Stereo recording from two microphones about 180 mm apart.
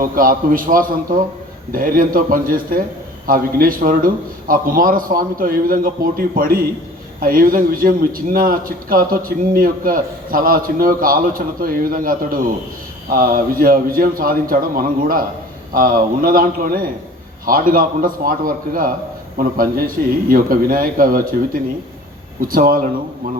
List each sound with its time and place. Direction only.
0.0 s a man's voice: 50° right (ahead or behind)